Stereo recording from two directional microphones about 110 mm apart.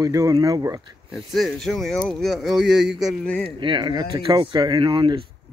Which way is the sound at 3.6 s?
45° right (ahead or behind).